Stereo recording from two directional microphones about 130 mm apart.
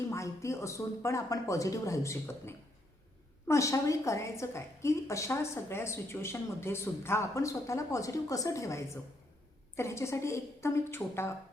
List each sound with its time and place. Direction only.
0.1 s a woman's voice: 25° left (ahead or behind)